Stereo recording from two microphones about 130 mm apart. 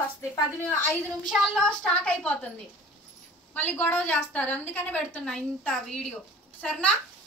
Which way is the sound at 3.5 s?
15° left (ahead or behind).